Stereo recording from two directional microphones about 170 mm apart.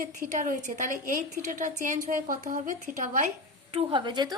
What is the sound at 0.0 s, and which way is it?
A woman's voice, 50° right (ahead or behind).